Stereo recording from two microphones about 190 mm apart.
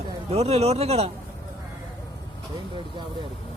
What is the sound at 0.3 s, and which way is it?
Speech, 35° right (ahead or behind).